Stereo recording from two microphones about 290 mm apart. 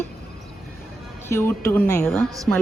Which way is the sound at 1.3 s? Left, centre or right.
Centre.